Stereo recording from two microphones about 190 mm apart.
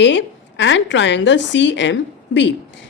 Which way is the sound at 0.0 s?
70° left (ahead or behind).